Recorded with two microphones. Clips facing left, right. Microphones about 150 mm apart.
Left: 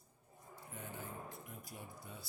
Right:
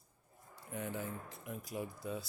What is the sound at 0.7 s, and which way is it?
Speech, 85° right.